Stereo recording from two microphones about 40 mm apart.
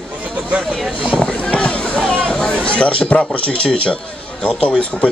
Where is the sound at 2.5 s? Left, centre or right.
Left.